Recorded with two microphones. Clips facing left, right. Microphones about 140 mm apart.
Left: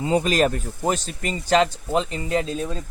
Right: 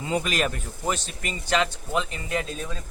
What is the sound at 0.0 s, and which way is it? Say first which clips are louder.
A man's voice: left 6 dB; 35° left (ahead or behind).